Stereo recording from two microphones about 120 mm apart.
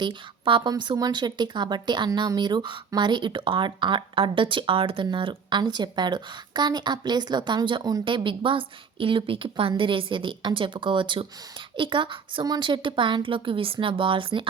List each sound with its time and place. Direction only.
0.0 s a woman's voice: 40° right (ahead or behind)